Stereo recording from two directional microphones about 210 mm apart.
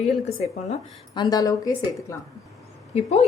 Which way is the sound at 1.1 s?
20° left (ahead or behind).